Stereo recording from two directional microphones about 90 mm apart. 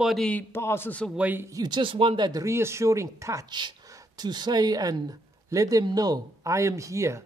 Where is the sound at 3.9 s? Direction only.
45° right (ahead or behind).